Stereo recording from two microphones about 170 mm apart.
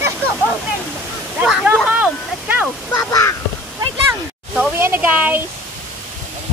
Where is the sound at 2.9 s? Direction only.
20° left (ahead or behind).